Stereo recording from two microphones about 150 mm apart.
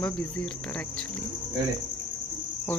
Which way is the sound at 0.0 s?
5° left (ahead or behind).